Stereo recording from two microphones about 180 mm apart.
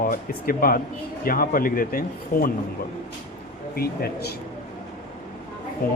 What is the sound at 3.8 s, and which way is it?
Speech, 60° left (ahead or behind).